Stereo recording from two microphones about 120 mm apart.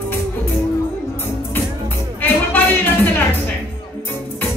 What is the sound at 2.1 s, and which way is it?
Music, 15° left (ahead or behind).